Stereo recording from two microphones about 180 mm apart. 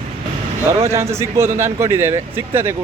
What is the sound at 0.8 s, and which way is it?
Speech, 15° right (ahead or behind).